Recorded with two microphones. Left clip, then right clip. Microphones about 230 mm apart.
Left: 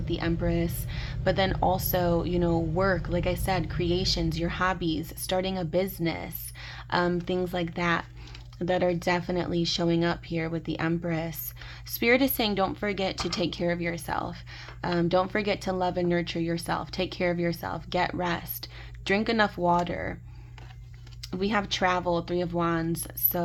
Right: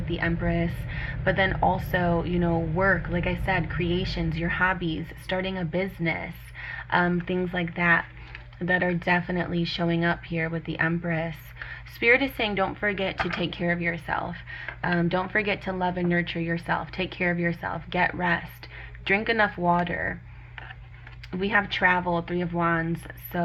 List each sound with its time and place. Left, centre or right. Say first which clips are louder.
0.1 s speech: right 1 dB; left
21.2 s speech: right 3 dB; left